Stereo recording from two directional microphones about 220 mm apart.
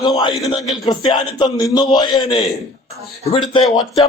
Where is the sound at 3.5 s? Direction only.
20° left (ahead or behind).